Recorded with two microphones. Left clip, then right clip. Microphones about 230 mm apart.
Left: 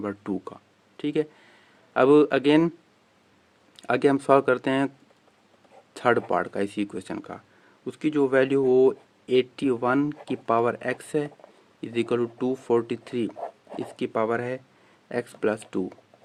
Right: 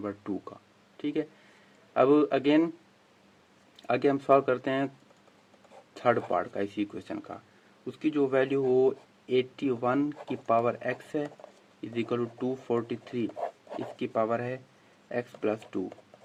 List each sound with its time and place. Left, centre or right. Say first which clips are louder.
0.0 s speech: left 4 dB; left
3.8 s speech: left 4 dB; left
5.9 s speech: left 4 dB; left
13.3 s dog: even; centre
14.0 s speech: left 3 dB; left